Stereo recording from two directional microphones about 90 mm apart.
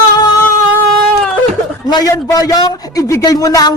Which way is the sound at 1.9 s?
45° left (ahead or behind).